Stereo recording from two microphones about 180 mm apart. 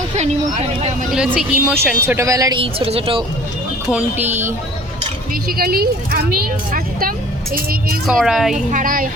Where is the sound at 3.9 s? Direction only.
10° right (ahead or behind).